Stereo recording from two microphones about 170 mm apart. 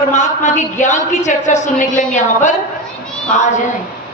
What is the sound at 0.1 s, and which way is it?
Speech, 45° left (ahead or behind).